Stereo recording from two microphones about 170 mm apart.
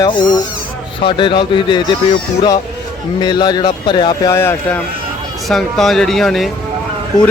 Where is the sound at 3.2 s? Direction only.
25° left (ahead or behind).